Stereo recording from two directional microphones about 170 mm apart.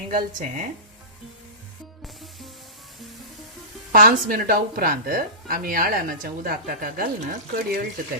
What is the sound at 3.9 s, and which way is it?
A woman's voice, 55° right (ahead or behind).